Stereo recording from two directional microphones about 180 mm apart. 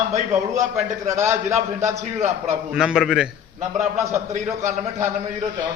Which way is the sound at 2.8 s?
5° right (ahead or behind).